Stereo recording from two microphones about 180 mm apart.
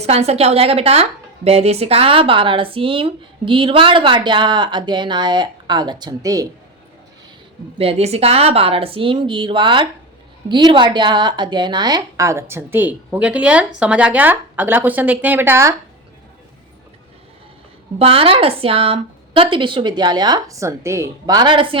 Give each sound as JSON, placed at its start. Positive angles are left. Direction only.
{"t": 0.0, "sound": "speech", "side_deg": -35}
{"t": 7.8, "sound": "speech", "side_deg": -35}
{"t": 18.0, "sound": "speech", "side_deg": -30}